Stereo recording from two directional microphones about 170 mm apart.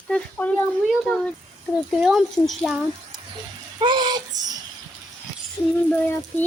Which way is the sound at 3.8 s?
25° right (ahead or behind).